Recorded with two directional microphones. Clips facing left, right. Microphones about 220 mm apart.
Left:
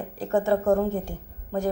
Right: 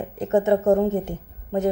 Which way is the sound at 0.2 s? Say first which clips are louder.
Right 4 dB; 20° right (ahead or behind).